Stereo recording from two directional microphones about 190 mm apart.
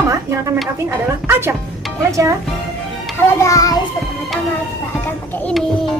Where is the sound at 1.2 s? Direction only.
15° right (ahead or behind).